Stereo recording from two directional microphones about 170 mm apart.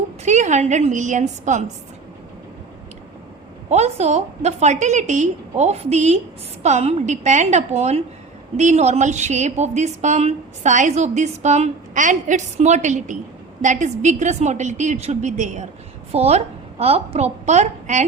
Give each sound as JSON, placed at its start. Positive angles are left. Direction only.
{"t": 0.3, "sound": "a woman's voice", "side_deg": -45}
{"t": 3.7, "sound": "a woman's voice", "side_deg": -40}